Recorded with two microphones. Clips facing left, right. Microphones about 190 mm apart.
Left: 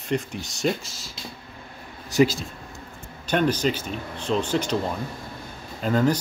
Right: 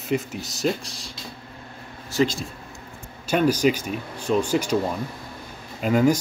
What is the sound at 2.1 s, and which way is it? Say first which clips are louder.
Speech: left 3 dB; 15° left (ahead or behind).